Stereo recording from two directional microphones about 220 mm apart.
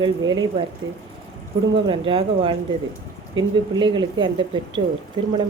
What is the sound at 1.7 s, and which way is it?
Speech, 25° right (ahead or behind).